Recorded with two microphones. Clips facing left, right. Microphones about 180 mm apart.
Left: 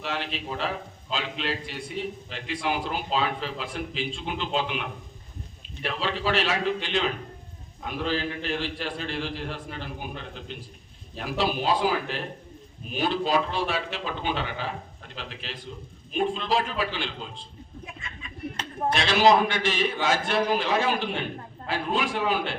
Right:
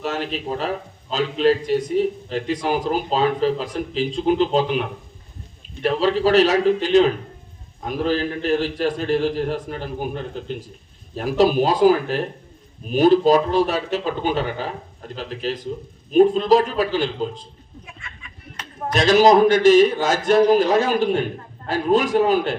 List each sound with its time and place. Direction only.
0.0 s a man's voice: 40° right (ahead or behind)
11.1 s a man's voice: 40° right (ahead or behind)
18.9 s a man's voice: 40° right (ahead or behind)